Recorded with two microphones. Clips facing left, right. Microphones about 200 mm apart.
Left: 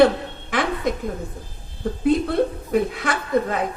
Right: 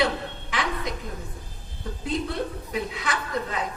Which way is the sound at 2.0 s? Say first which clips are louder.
Left 9 dB; 50° left (ahead or behind).